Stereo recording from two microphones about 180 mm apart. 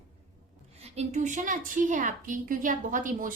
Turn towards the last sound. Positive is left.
turn(degrees=-45)  # may be behind; listen again after turning